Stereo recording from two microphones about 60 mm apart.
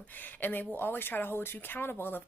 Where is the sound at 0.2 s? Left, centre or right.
Left.